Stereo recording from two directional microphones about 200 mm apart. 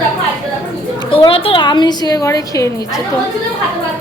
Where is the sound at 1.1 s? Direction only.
25° left (ahead or behind).